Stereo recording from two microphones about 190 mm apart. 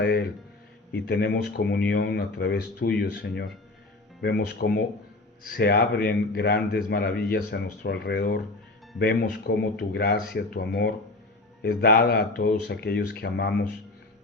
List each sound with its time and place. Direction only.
0.0 s speech: 60° left (ahead or behind)